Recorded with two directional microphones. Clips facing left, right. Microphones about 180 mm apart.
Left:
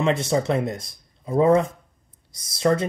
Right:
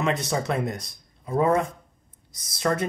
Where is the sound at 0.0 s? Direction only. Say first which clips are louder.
Left 4 dB; 25° left (ahead or behind).